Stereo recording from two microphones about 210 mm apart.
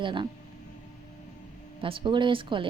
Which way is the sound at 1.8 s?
25° right (ahead or behind).